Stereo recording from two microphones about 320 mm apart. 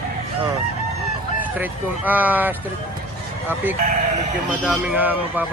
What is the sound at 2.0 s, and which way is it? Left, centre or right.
Speech, centre.